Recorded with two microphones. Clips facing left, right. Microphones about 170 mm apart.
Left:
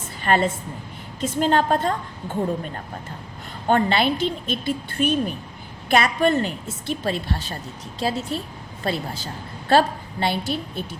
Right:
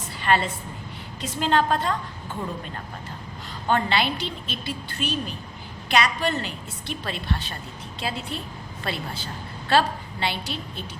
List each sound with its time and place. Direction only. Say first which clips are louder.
0.2 s a woman's voice: left 3 dB; 45° left (ahead or behind)
3.7 s a woman's voice: left 4 dB; 45° left (ahead or behind)